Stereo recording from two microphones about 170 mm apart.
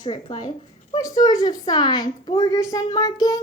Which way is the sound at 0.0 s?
25° left (ahead or behind).